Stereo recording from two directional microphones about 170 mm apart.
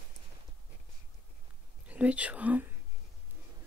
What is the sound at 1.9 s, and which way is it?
Whispering, 5° right (ahead or behind).